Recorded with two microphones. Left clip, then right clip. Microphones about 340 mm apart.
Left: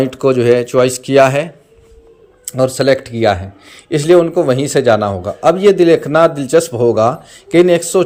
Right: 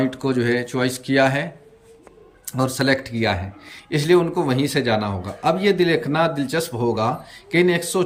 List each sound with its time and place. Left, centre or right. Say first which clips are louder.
0.0 s speech: left 9 dB; centre
2.5 s speech: left 8 dB; centre